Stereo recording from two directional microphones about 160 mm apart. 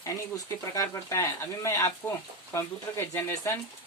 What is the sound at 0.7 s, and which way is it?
Speech, 20° left (ahead or behind).